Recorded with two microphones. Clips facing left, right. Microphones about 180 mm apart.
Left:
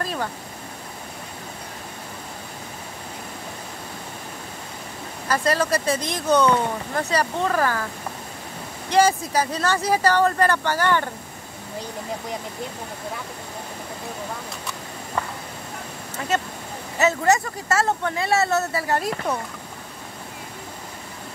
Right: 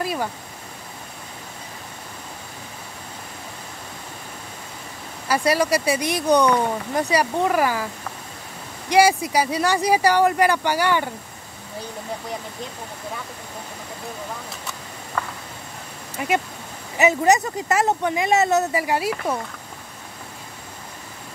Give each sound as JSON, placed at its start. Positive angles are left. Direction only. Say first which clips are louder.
{"t": 0.0, "sound": "vehicle", "louder": "right 2 dB", "side_deg": -10}
{"t": 5.3, "sound": "speech", "louder": "right 2 dB", "side_deg": -10}
{"t": 16.2, "sound": "speech", "louder": "right 2 dB", "side_deg": -15}